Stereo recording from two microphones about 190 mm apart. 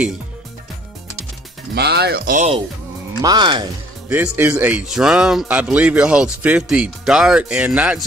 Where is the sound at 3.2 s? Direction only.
20° right (ahead or behind).